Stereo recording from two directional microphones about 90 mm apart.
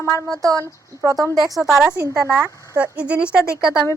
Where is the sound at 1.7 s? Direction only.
5° right (ahead or behind).